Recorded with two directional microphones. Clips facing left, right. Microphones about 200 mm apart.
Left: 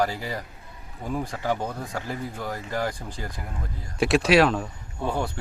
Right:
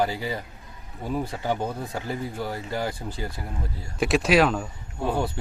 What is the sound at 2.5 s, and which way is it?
Speech, 25° right (ahead or behind).